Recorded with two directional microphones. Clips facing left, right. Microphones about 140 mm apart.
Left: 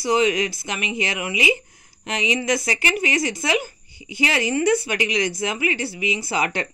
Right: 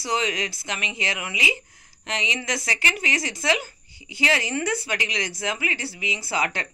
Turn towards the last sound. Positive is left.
turn(degrees=20)  # may be behind; listen again after turning